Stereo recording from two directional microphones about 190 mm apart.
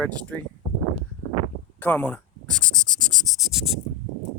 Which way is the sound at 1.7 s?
10° left (ahead or behind).